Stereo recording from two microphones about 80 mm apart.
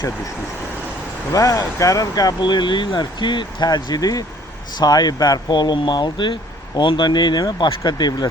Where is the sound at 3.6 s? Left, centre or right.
Left.